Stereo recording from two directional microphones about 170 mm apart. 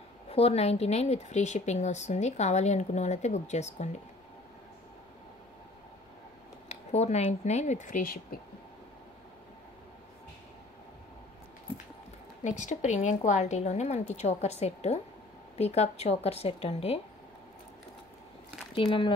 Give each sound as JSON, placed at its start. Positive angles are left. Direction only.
{"t": 0.3, "sound": "a woman's voice", "side_deg": 35}
{"t": 6.7, "sound": "a woman's voice", "side_deg": 40}
{"t": 12.4, "sound": "a woman's voice", "side_deg": 45}
{"t": 18.8, "sound": "speech", "side_deg": 30}